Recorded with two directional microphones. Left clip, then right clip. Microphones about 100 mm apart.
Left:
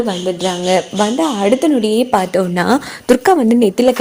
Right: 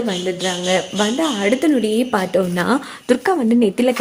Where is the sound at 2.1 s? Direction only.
90° left.